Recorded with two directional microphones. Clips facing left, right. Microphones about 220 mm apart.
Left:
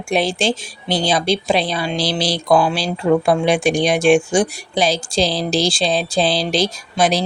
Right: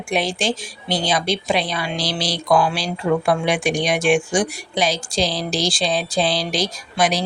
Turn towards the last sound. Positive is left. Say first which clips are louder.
# left 3 dB
turn(degrees=25)  # may be behind; listen again after turning